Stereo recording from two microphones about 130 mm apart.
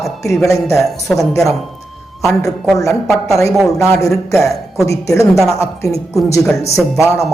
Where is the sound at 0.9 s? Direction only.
Centre (ahead or behind).